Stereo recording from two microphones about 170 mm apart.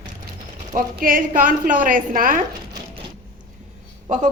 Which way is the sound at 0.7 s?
55° right (ahead or behind).